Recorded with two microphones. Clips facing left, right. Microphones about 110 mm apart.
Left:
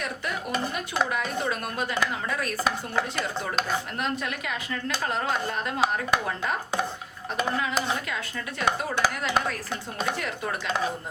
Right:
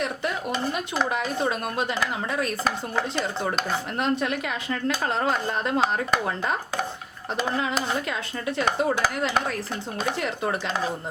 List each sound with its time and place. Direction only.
1.1 s speech: 25° right (ahead or behind)
4.0 s a woman's voice: 30° right (ahead or behind)
10.2 s speech: 30° right (ahead or behind)